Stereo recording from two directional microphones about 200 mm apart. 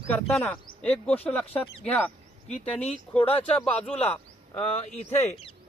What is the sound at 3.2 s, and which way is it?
Speech, 30° left (ahead or behind).